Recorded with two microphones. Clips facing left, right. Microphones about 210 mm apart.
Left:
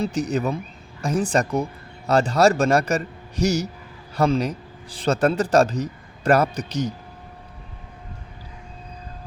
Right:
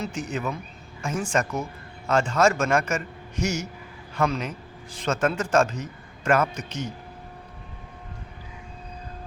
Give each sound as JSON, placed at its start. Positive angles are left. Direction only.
{"t": 0.0, "sound": "a man's voice", "side_deg": 35}